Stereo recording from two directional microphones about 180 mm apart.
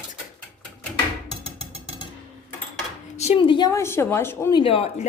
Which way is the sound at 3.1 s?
35° left (ahead or behind).